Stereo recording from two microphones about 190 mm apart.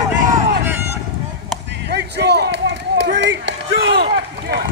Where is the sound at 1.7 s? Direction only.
65° right (ahead or behind).